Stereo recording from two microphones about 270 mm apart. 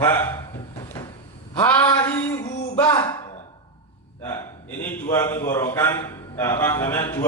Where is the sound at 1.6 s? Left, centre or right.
Centre.